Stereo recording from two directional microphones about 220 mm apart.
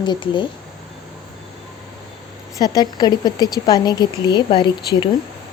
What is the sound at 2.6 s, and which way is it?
Speech, 15° left (ahead or behind).